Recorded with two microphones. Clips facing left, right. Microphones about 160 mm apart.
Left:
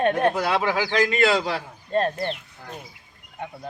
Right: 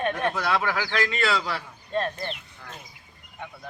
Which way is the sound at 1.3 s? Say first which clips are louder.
Left 4 dB; 40° left (ahead or behind).